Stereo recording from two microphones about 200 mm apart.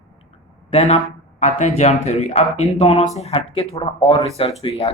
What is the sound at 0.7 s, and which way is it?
Speech, 35° left (ahead or behind).